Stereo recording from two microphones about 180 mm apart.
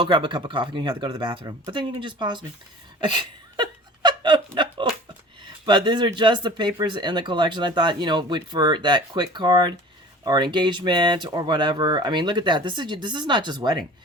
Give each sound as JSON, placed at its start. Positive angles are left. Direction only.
{"t": 0.0, "sound": "speech", "side_deg": -25}
{"t": 3.0, "sound": "laughter", "side_deg": -25}
{"t": 4.5, "sound": "a sound", "side_deg": -25}
{"t": 5.6, "sound": "speech", "side_deg": -25}